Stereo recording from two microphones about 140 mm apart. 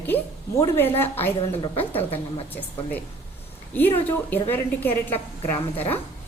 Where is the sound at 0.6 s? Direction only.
15° left (ahead or behind).